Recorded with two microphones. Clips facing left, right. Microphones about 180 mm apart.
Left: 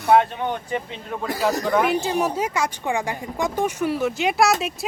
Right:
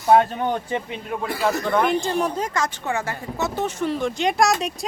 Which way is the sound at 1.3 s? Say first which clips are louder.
Left 1 dB; 40° left (ahead or behind).